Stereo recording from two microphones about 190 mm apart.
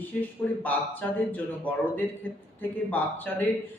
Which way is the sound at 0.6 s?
10° left (ahead or behind).